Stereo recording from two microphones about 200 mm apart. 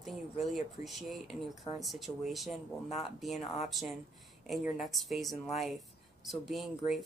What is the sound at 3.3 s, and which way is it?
Speech, 35° left (ahead or behind).